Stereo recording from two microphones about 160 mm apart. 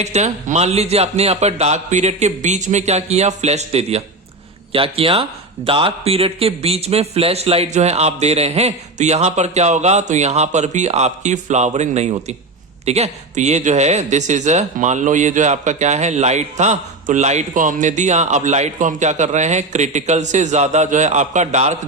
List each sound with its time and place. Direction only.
0.0 s speech: 45° right (ahead or behind)